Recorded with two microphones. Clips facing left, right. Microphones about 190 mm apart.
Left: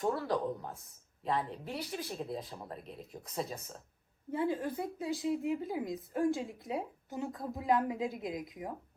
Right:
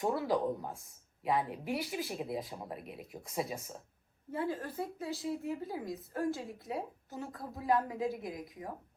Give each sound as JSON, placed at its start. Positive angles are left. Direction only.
{"t": 0.0, "sound": "speech", "side_deg": -5}
{"t": 4.3, "sound": "a woman's voice", "side_deg": 20}